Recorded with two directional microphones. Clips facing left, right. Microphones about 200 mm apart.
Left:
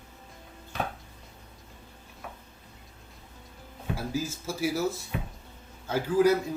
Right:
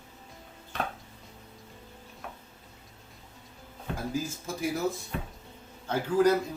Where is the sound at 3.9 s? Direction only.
5° left (ahead or behind).